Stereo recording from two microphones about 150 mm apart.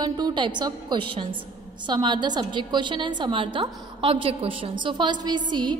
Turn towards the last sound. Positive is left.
turn(degrees=-30)  # may be behind; listen again after turning